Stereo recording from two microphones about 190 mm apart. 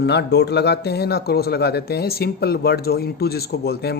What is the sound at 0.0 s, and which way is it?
Speech, 60° left (ahead or behind).